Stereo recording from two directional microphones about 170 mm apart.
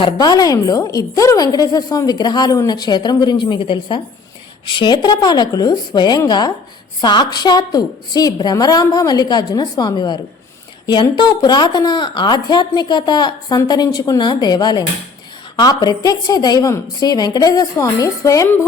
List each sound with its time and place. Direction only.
0.0 s a woman's voice: 25° left (ahead or behind)